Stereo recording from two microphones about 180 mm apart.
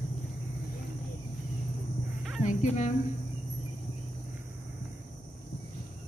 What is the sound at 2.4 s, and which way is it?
Speech, 40° left (ahead or behind).